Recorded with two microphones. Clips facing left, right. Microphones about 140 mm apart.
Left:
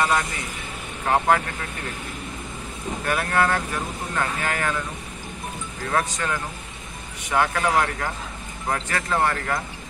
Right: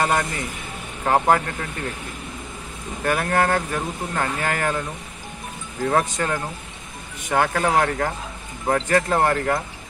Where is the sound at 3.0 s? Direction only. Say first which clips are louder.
Right 2 dB; 45° right (ahead or behind).